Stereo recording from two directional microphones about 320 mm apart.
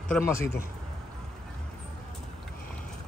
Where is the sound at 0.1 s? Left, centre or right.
Centre.